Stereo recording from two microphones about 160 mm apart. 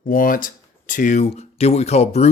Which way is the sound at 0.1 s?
60° left (ahead or behind).